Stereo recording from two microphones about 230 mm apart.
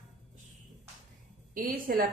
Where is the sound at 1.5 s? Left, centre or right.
Right.